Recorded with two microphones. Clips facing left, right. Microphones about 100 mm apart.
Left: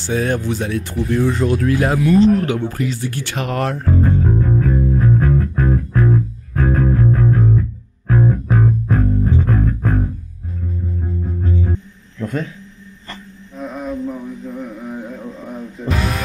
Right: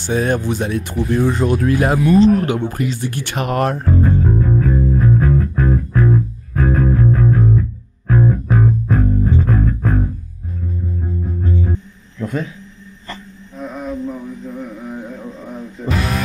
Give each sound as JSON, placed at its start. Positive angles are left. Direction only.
{"t": 0.0, "sound": "speech", "side_deg": -25}
{"t": 3.9, "sound": "music", "side_deg": 0}
{"t": 12.2, "sound": "a sound", "side_deg": -10}
{"t": 13.6, "sound": "music", "side_deg": 0}